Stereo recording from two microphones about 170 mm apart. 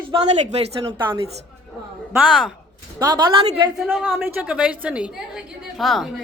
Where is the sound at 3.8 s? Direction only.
5° right (ahead or behind).